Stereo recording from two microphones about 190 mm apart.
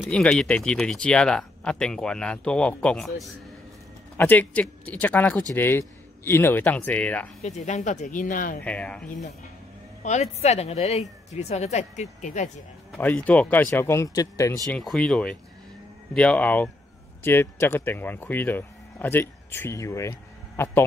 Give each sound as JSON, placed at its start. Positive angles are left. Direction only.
{"t": 0.1, "sound": "speech", "side_deg": 5}
{"t": 7.4, "sound": "speech", "side_deg": 40}
{"t": 8.6, "sound": "speech", "side_deg": 5}
{"t": 10.0, "sound": "speech", "side_deg": 35}
{"t": 12.9, "sound": "speech", "side_deg": 10}
{"t": 14.7, "sound": "speech", "side_deg": 5}